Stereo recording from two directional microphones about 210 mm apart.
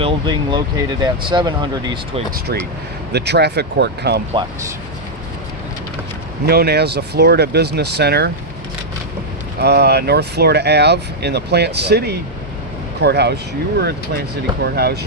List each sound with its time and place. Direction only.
0.0 s speech: 20° right (ahead or behind)
3.1 s speech: 50° right (ahead or behind)
6.4 s speech: 50° right (ahead or behind)
9.6 s speech: 50° right (ahead or behind)